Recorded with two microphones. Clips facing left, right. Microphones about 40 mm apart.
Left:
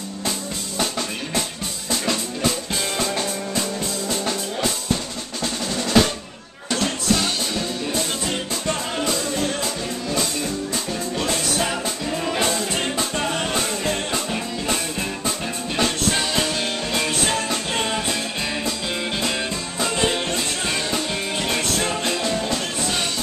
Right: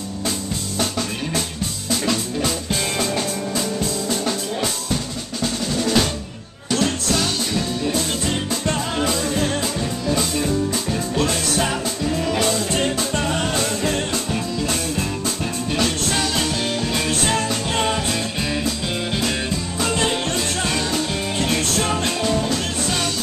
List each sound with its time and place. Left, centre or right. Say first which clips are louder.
0.7 s music: right 1 dB; centre
5.4 s drum: right 3 dB; centre
6.7 s music: right 1 dB; centre
8.9 s music: right 2 dB; centre
9.3 s music: right 2 dB; centre
10.7 s music: right 3 dB; centre
12.2 s music: right 1 dB; left
12.9 s music: right 2 dB; centre
19.8 s music: even; centre
21.9 s music: right 2 dB; centre